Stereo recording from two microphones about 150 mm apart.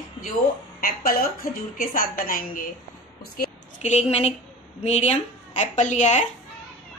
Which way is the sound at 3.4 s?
75° left (ahead or behind).